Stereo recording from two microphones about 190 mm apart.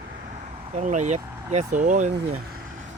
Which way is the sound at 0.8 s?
40° right (ahead or behind).